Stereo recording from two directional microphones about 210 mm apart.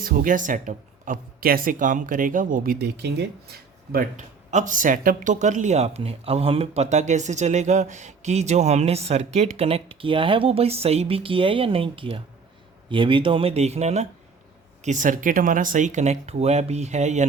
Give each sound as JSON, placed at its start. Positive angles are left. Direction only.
{"t": 0.0, "sound": "speech", "side_deg": -40}
{"t": 2.7, "sound": "speech", "side_deg": -55}